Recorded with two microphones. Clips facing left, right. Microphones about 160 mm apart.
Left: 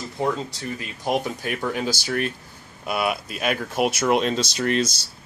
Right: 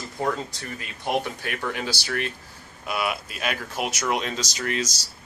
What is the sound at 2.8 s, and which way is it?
Speech, 25° left (ahead or behind).